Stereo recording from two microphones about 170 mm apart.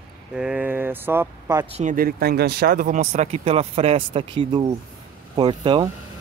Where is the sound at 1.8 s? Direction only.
55° right (ahead or behind); by 5.8 s 30° right (ahead or behind).